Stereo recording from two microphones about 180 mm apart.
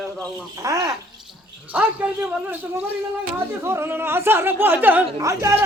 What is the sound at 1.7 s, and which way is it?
Speech, 10° right (ahead or behind).